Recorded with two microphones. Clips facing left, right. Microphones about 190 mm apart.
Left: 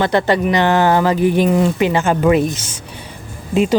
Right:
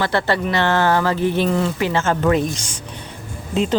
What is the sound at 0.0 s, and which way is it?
Speech, 15° left (ahead or behind).